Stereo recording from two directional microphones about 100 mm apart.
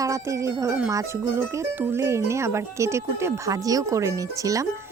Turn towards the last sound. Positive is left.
turn(degrees=-35)  # may be behind; listen again after turning